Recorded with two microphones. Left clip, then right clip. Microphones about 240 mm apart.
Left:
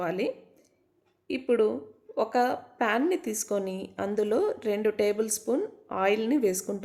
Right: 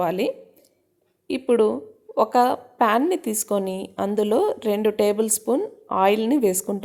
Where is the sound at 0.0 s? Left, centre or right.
Centre.